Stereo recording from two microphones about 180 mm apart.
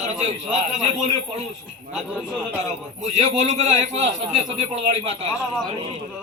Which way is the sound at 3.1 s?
40° right (ahead or behind).